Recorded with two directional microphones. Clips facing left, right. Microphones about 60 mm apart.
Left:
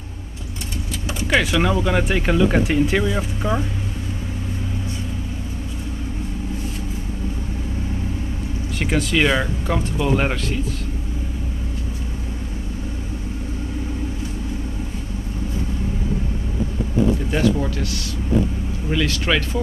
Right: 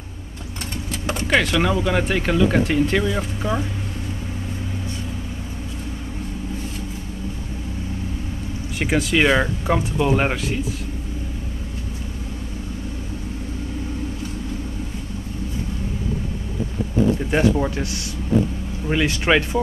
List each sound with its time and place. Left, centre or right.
1.2 s speech: centre
8.7 s speech: centre
17.3 s speech: right